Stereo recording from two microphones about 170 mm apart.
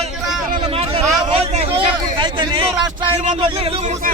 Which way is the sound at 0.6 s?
35° right (ahead or behind).